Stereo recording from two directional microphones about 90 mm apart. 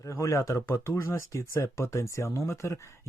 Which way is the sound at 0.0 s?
35° left (ahead or behind).